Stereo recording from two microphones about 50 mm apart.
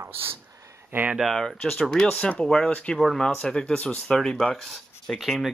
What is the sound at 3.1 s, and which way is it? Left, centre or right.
Speech, centre.